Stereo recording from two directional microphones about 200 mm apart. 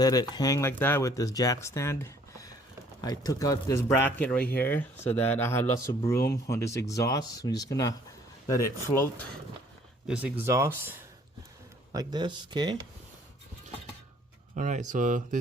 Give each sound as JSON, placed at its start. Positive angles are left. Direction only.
{"t": 0.0, "sound": "speech", "side_deg": 20}
{"t": 10.1, "sound": "speech", "side_deg": -5}
{"t": 14.5, "sound": "speech", "side_deg": -40}